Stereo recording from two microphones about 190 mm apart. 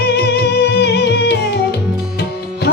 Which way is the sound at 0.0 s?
60° left (ahead or behind).